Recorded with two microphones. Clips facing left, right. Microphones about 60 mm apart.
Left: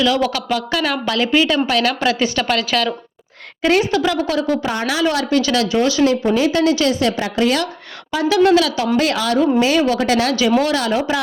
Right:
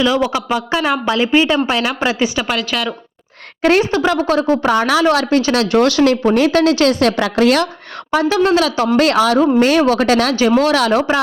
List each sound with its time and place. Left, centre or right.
0.0 s speech: right; by 2.9 s centre
3.6 s a woman's voice: right
4.6 s speech: right
4.9 s speech: right
5.7 s speech: right
8.1 s speech: right
9.0 s a woman's voice: right